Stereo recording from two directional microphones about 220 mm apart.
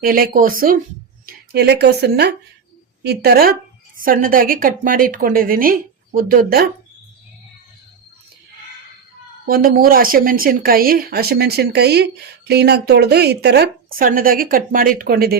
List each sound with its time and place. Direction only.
0.0 s a woman's voice: 40° right (ahead or behind)
9.5 s speech: 40° right (ahead or behind)